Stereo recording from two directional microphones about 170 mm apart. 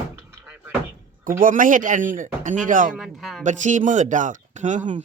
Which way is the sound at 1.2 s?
55° right (ahead or behind).